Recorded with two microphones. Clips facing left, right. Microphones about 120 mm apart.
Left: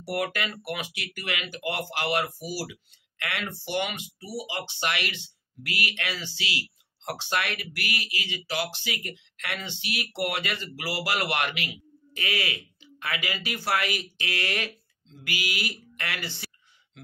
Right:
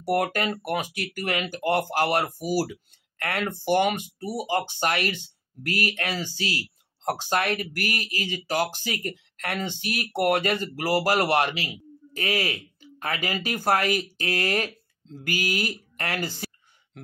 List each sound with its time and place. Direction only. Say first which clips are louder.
0.0 s speech: right 5 dB; 40° right (ahead or behind)